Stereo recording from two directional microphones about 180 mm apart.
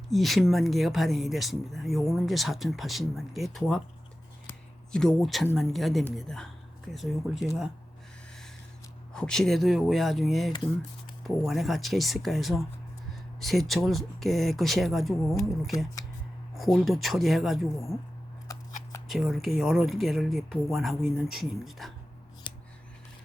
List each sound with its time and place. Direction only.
0.1 s speech: centre (ahead or behind)
4.4 s a sound: 5° left (ahead or behind)
5.5 s speech: centre (ahead or behind)
9.1 s speech: 5° left (ahead or behind)
16.6 s speech: centre (ahead or behind)
18.4 s scissors: 20° left (ahead or behind)
19.0 s speech: centre (ahead or behind)
22.5 s scissors: 25° left (ahead or behind)